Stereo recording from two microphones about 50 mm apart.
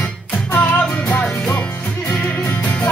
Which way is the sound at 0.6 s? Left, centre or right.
Left.